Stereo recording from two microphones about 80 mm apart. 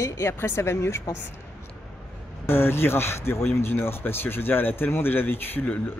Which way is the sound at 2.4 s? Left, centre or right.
Left.